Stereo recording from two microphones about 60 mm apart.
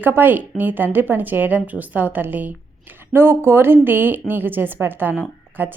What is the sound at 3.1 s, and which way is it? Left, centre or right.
A woman's voice, right.